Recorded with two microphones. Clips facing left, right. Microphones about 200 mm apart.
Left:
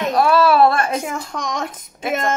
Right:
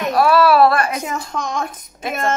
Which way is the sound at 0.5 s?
25° left (ahead or behind).